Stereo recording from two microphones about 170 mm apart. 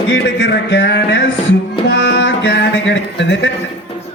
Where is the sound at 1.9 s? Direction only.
90° left.